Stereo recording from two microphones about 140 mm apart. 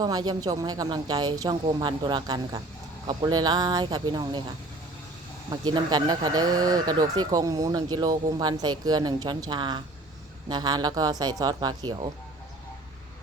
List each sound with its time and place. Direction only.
0.0 s speech: 30° right (ahead or behind)
5.5 s speech: 30° right (ahead or behind)